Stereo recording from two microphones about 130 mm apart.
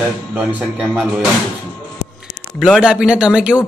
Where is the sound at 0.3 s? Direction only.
10° right (ahead or behind).